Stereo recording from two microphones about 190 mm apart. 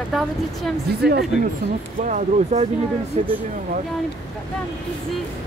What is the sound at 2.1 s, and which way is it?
Speech, 40° right (ahead or behind).